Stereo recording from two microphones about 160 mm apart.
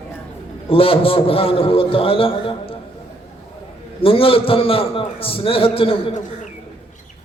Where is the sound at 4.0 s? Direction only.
35° left (ahead or behind).